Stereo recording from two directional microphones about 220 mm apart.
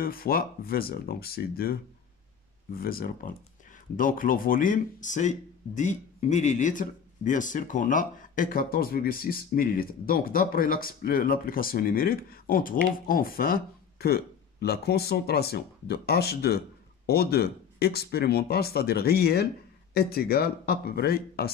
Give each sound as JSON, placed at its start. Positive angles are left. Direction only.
{"t": 0.0, "sound": "speech", "side_deg": 40}
{"t": 2.8, "sound": "speech", "side_deg": 40}